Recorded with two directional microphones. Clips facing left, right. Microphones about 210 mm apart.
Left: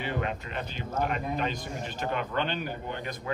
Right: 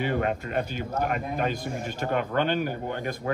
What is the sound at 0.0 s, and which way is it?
Speech, 50° right (ahead or behind).